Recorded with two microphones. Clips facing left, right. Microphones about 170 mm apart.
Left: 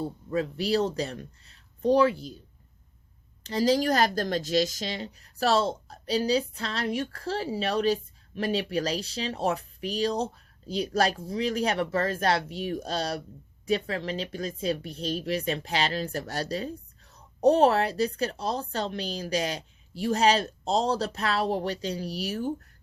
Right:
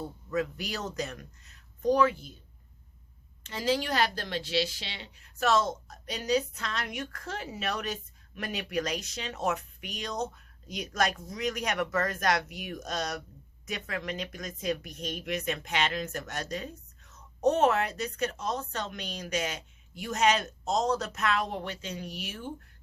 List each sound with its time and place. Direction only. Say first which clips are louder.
0.0 s a woman's voice: left 3 dB; 30° left (ahead or behind)
3.4 s a woman's voice: left 6 dB; 35° left (ahead or behind)